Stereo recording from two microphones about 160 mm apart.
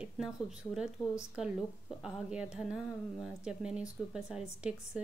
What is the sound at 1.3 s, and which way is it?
A woman's voice, 5° right (ahead or behind).